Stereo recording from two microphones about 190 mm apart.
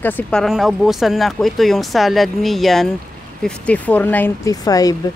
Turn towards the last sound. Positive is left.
turn(degrees=20)  # may be behind; listen again after turning